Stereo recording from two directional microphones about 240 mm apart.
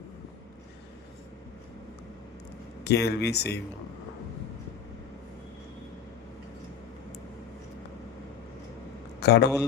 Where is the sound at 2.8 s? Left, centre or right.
Left.